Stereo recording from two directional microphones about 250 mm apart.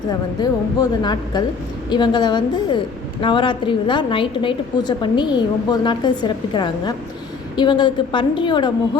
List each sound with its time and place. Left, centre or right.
0.3 s a woman's voice: centre